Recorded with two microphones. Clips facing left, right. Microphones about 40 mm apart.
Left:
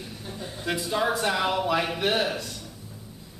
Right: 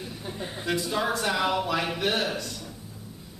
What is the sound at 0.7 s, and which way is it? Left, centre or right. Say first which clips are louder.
Speech: left 1 dB; centre.